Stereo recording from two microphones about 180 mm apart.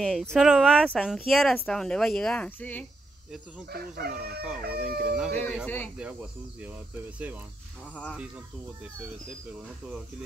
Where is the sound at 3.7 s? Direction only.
60° right (ahead or behind).